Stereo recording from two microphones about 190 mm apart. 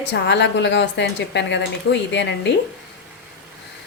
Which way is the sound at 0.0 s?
65° left (ahead or behind).